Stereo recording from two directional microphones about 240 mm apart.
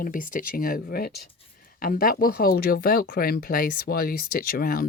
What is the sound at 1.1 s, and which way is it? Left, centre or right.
Speech, left.